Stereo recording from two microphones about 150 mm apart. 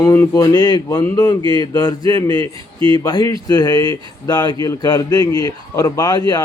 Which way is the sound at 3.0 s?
25° left (ahead or behind).